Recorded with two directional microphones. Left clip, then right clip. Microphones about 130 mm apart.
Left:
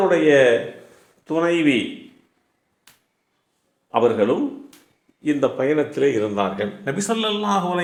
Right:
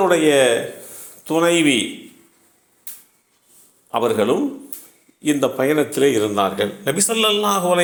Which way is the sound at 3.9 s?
25° right (ahead or behind).